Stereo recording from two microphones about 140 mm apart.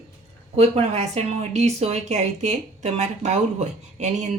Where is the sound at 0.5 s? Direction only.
45° right (ahead or behind).